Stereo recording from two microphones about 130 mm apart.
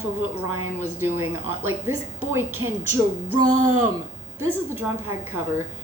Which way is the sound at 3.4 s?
30° right (ahead or behind).